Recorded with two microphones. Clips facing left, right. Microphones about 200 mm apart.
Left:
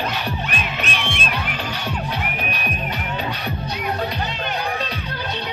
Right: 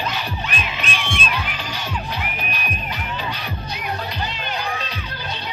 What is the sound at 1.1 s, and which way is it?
Music, 55° left (ahead or behind).